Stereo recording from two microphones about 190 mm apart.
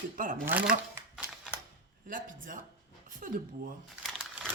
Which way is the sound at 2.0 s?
45° right (ahead or behind).